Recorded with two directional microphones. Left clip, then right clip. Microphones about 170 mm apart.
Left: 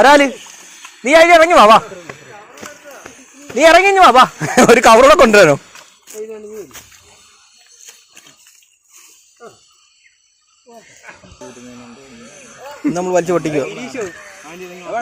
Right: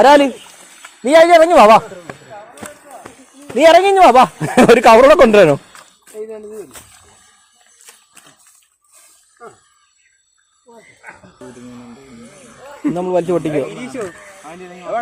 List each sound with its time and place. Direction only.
0.0 s speech: 15° right (ahead or behind)
3.6 s speech: 20° right (ahead or behind)
3.9 s speech: 5° right (ahead or behind)
4.9 s a man's voice: 5° left (ahead or behind)
5.3 s a sound: 5° right (ahead or behind)
11.0 s a sound: 5° left (ahead or behind)
12.9 s a man's voice: 5° right (ahead or behind)
13.7 s speech: 35° right (ahead or behind)
13.9 s speech: 10° right (ahead or behind)